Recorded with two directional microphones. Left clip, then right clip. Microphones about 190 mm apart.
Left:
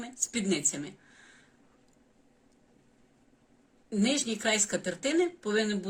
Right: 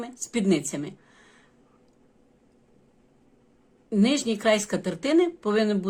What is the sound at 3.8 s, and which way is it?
Speech, 45° right (ahead or behind).